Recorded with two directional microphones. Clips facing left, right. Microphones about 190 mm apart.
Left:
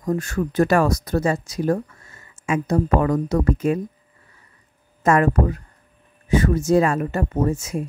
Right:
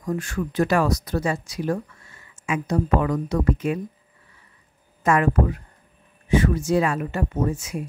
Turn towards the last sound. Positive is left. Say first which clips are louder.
# left 3 dB
turn(degrees=45)  # may be behind; listen again after turning